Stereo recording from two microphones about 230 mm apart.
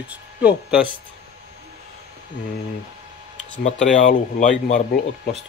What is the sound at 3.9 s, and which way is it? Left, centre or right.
Speech, left.